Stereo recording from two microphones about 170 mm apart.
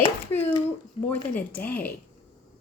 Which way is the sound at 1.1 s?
10° left (ahead or behind).